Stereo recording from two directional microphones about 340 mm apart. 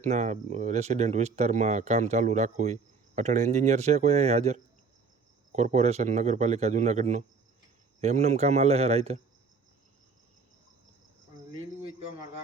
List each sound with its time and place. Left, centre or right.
0.0 s speech: right